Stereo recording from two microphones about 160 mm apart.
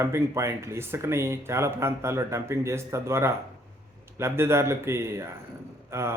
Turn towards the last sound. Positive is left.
turn(degrees=-15)  # may be behind; listen again after turning